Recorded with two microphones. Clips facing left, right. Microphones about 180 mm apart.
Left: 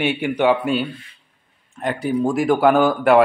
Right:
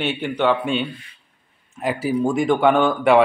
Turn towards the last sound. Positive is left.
turn(degrees=5)  # may be behind; listen again after turning